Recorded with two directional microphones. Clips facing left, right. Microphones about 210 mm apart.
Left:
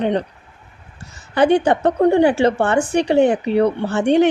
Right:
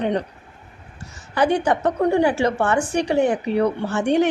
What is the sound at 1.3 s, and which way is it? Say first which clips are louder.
A woman's voice: left 4 dB; 25° left (ahead or behind).